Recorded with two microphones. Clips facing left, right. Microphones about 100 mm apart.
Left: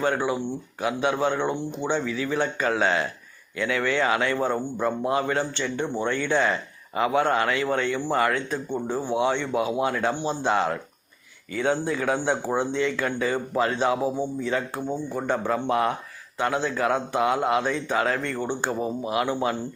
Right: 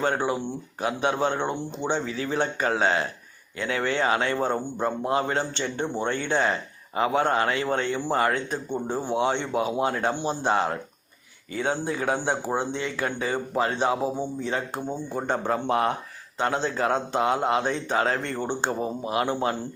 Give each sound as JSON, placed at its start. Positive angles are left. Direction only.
{"t": 0.8, "sound": "speech", "side_deg": -25}